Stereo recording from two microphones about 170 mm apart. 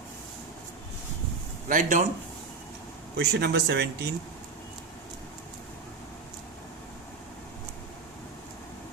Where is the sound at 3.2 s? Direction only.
75° right (ahead or behind).